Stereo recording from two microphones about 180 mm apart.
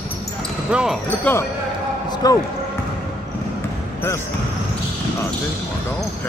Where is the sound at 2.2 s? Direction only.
20° left (ahead or behind).